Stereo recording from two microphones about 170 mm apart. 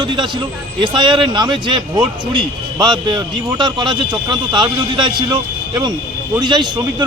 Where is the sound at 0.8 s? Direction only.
25° right (ahead or behind).